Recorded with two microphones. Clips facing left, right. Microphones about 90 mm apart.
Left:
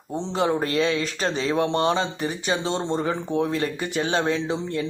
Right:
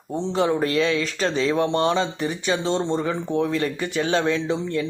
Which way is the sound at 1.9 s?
35° left (ahead or behind).